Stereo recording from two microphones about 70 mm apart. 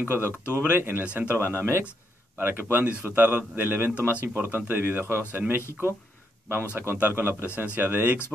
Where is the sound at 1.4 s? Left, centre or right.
Right.